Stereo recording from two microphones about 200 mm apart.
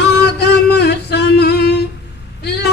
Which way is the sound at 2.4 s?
55° left (ahead or behind).